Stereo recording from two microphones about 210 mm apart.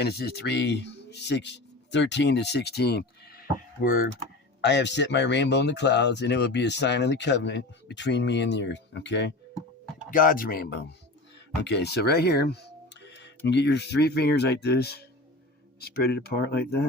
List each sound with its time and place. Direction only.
0.0 s speech: 50° left (ahead or behind)
4.6 s speech: 55° left (ahead or behind)
10.1 s speech: 40° left (ahead or behind)